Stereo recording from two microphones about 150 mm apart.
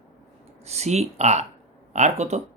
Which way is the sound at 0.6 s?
45° right (ahead or behind).